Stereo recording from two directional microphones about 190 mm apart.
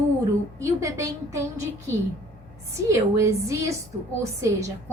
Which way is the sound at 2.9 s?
15° right (ahead or behind).